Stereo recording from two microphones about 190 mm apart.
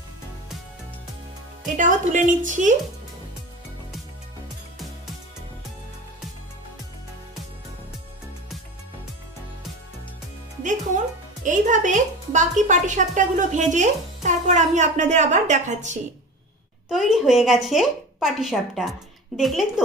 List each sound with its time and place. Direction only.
1.8 s a woman's voice: 40° right (ahead or behind)
11.4 s a woman's voice: 40° right (ahead or behind)
16.9 s speech: centre (ahead or behind)